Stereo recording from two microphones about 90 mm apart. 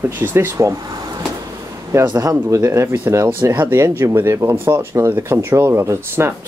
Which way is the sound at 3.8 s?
30° right (ahead or behind).